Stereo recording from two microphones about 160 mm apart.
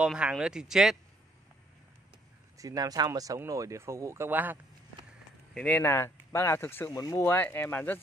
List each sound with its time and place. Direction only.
0.0 s speech: 5° right (ahead or behind)
2.5 s speech: 20° right (ahead or behind)
5.5 s speech: 5° left (ahead or behind)